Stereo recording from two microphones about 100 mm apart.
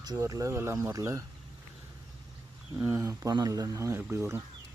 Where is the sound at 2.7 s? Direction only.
20° right (ahead or behind).